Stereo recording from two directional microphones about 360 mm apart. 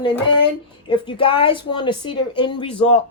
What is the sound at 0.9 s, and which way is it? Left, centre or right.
Speech, centre.